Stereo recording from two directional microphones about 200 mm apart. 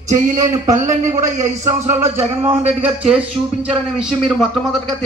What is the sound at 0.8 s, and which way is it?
Speech, 15° right (ahead or behind).